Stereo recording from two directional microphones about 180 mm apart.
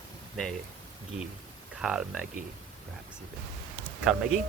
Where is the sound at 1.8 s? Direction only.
5° right (ahead or behind).